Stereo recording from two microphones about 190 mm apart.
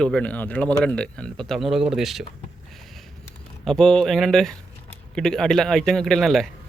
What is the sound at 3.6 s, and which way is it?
Speech, 5° left (ahead or behind).